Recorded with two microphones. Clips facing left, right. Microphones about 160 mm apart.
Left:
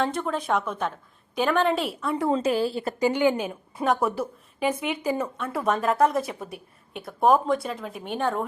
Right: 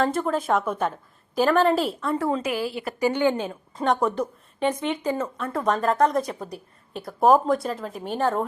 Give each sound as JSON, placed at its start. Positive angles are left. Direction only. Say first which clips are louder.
{"t": 0.0, "sound": "a woman's voice", "louder": "right 3 dB", "side_deg": -5}
{"t": 2.3, "sound": "a woman's voice", "louder": "left 3 dB", "side_deg": 30}
{"t": 3.0, "sound": "a woman's voice", "louder": "even", "side_deg": 15}